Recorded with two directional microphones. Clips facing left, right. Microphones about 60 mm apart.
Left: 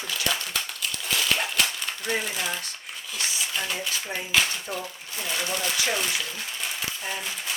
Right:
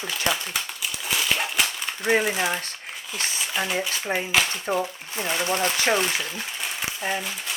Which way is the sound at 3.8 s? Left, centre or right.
Right.